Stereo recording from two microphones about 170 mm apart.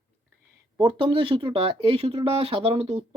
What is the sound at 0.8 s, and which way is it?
Speech, 30° right (ahead or behind).